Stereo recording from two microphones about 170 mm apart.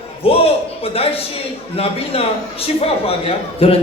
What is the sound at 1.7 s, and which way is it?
Speech, 35° left (ahead or behind).